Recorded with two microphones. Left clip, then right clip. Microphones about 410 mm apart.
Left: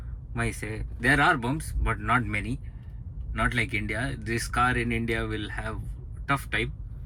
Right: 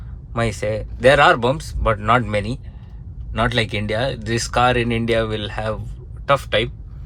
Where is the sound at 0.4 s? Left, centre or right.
Centre.